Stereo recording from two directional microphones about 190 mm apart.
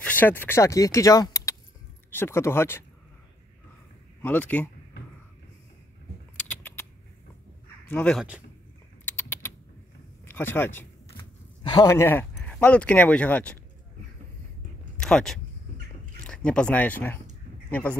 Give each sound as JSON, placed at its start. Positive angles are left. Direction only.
{"t": 0.0, "sound": "speech", "side_deg": 10}
{"t": 4.2, "sound": "speech", "side_deg": 10}
{"t": 6.3, "sound": "a sound", "side_deg": 10}
{"t": 7.9, "sound": "speech", "side_deg": 5}
{"t": 9.0, "sound": "typing", "side_deg": 10}
{"t": 10.2, "sound": "speech", "side_deg": 10}
{"t": 11.6, "sound": "speech", "side_deg": 20}
{"t": 15.0, "sound": "speech", "side_deg": 5}